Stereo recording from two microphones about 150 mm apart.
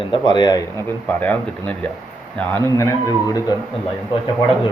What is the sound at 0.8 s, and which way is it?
Speech, 10° left (ahead or behind).